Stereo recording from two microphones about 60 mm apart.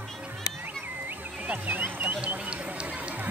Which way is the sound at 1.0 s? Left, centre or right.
Right.